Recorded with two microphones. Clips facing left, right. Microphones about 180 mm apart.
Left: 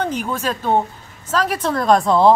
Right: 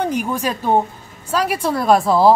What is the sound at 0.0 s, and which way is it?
Speech, 10° right (ahead or behind).